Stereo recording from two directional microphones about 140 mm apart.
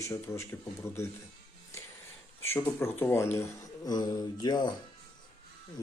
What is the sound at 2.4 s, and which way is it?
Speech, 15° left (ahead or behind).